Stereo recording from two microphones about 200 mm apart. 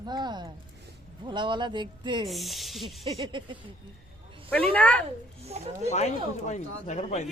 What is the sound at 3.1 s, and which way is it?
Speech, 25° right (ahead or behind).